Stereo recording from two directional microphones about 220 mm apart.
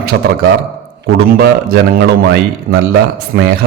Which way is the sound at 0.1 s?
55° right (ahead or behind).